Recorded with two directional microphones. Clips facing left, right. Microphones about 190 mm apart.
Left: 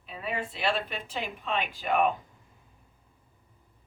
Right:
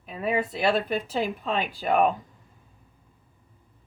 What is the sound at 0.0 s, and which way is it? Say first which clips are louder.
Speech: right 7 dB; 45° right (ahead or behind).